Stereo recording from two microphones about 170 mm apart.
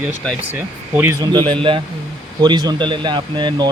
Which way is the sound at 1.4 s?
30° right (ahead or behind).